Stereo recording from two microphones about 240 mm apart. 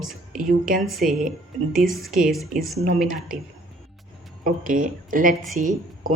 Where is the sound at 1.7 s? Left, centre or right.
Centre.